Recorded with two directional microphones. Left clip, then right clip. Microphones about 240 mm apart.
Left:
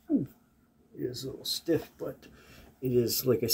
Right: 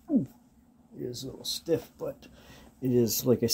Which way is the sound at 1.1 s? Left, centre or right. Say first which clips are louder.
Left 1 dB; right.